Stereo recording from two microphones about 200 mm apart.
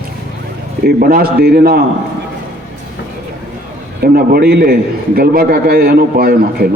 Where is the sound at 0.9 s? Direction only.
50° right (ahead or behind).